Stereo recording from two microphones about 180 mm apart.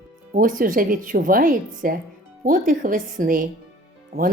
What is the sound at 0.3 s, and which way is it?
Speech, 50° right (ahead or behind).